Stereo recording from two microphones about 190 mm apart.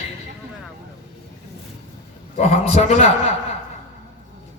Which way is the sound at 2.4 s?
35° left (ahead or behind).